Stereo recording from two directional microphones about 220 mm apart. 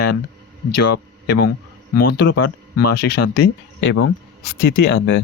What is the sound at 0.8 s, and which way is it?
Speech, 45° left (ahead or behind).